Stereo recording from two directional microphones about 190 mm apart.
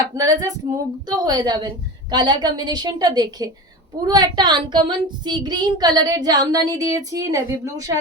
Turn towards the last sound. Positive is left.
turn(degrees=-15)  # may be behind; listen again after turning